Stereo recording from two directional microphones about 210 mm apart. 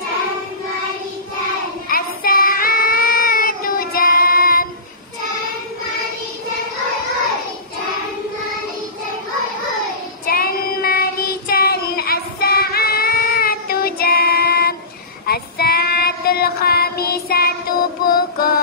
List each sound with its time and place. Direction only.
1.9 s child singing: 45° left (ahead or behind)
10.2 s child singing: 45° left (ahead or behind)
18.0 s music: 45° left (ahead or behind)